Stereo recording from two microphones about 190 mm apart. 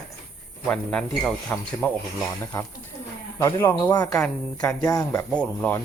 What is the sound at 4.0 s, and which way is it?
A man's voice, 5° left (ahead or behind).